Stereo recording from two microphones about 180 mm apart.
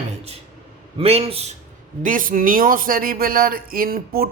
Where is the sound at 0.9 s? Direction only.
35° right (ahead or behind).